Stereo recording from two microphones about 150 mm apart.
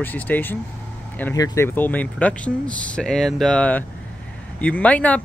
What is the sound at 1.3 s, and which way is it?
Speech, 25° left (ahead or behind).